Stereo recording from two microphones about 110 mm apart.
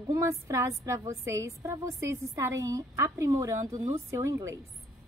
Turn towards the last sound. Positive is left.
turn(degrees=-25)  # may be behind; listen again after turning